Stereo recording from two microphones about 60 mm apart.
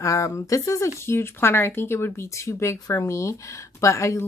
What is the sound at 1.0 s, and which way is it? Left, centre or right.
A woman's voice, left.